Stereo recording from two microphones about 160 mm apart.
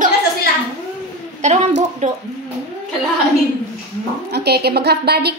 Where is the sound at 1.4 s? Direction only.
45° right (ahead or behind).